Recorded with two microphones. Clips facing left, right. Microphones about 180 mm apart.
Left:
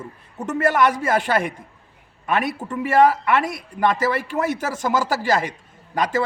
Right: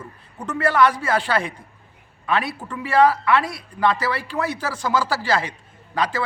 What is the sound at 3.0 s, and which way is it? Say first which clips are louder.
Speech: right 1 dB; 20° left (ahead or behind).